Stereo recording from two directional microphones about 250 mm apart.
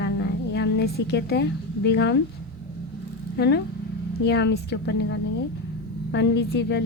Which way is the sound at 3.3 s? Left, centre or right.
Left.